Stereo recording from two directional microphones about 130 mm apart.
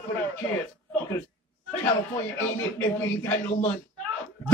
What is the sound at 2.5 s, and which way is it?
Speech, 15° left (ahead or behind).